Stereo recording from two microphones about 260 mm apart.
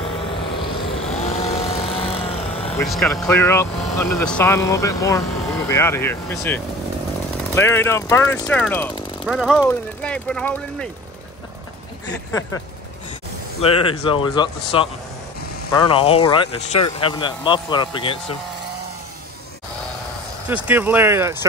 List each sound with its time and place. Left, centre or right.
0.8 s vehicle: left
2.9 s speech: centre
13.6 s speech: left
20.4 s speech: centre